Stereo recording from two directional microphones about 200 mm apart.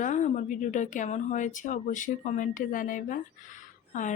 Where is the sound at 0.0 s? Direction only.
35° left (ahead or behind).